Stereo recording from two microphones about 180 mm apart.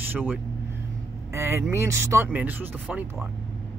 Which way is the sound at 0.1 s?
10° right (ahead or behind).